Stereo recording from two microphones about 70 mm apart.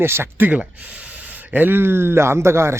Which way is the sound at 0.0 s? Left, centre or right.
Right.